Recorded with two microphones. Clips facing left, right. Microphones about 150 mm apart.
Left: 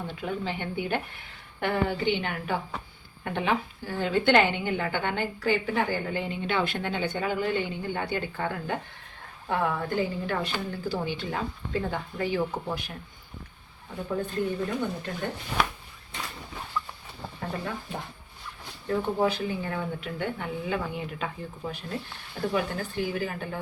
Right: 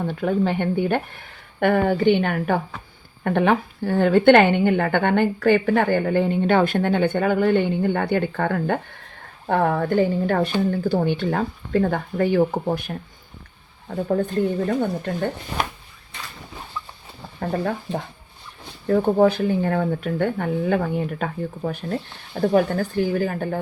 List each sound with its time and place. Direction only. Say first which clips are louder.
0.0 s a woman's voice: right 10 dB; 55° right (ahead or behind)
14.7 s speech: right 8 dB; 45° right (ahead or behind)
17.4 s speech: right 10 dB; 55° right (ahead or behind)